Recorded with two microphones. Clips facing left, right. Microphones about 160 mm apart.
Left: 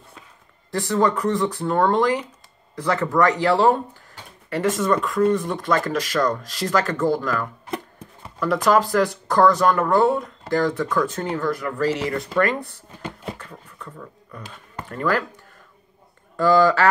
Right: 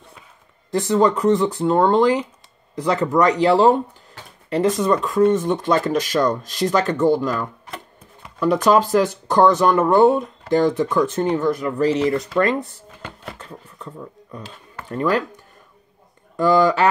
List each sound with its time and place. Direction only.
0.7 s speech: 20° right (ahead or behind)
13.4 s a sound: 20° right (ahead or behind)
14.9 s speech: 20° right (ahead or behind)
16.3 s speech: 20° right (ahead or behind)